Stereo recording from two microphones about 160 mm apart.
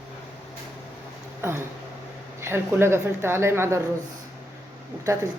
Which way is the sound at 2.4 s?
15° right (ahead or behind).